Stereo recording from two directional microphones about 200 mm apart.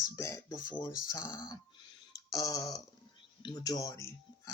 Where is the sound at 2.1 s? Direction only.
20° left (ahead or behind).